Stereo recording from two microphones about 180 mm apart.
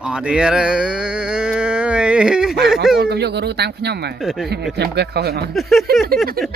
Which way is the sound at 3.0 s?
65° right (ahead or behind).